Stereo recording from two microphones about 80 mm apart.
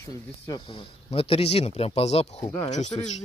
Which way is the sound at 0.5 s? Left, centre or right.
Left.